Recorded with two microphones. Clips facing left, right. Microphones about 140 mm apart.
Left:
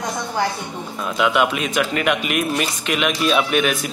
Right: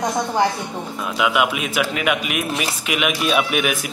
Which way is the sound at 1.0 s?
5° right (ahead or behind).